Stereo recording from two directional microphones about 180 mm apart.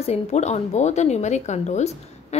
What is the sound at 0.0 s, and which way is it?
A woman's voice, 35° left (ahead or behind).